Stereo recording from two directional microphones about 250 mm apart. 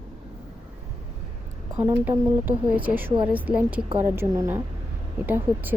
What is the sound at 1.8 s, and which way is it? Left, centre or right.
Speech, centre.